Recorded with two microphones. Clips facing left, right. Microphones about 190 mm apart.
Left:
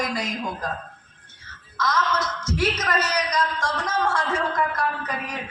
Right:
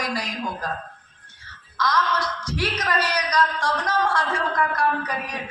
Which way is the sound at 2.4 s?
45° left (ahead or behind).